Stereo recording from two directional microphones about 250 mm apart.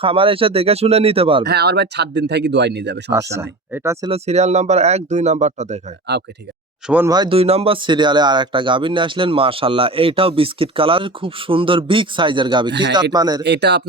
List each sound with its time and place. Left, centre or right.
0.0 s speech: right
1.5 s speech: right
3.3 s speech: centre
4.1 s speech: right
6.8 s speech: centre
13.4 s speech: right